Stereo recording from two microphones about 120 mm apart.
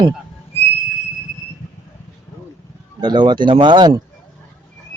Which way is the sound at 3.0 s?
40° right (ahead or behind).